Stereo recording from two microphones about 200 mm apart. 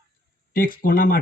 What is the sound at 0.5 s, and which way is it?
Speech, 45° left (ahead or behind).